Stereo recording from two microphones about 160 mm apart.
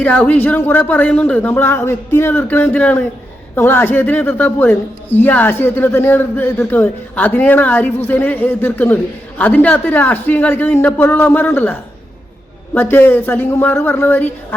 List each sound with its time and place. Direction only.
0.0 s a woman's voice: 10° left (ahead or behind)